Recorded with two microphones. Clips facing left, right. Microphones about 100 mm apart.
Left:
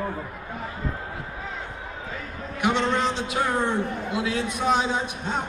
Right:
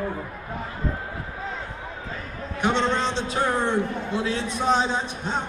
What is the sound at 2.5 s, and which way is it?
Speech, 30° right (ahead or behind).